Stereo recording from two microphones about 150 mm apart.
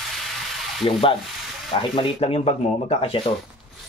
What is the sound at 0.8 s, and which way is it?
Speech, 35° left (ahead or behind).